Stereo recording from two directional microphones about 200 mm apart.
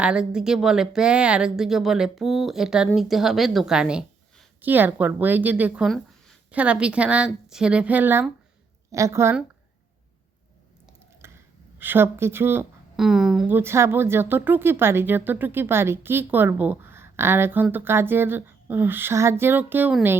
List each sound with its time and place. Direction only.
0.0 s a woman's voice: 5° right (ahead or behind)
11.2 s a sound: 15° right (ahead or behind)
11.8 s speech: 10° right (ahead or behind)